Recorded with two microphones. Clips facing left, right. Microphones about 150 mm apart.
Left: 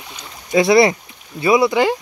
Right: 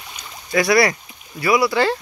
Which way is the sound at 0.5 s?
25° left (ahead or behind).